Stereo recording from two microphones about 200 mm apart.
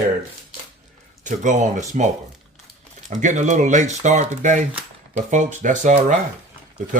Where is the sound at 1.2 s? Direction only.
40° right (ahead or behind).